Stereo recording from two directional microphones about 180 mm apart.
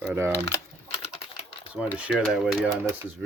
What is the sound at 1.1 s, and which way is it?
Typing, 35° left (ahead or behind).